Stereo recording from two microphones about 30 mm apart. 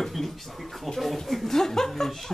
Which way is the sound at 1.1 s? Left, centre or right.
Centre.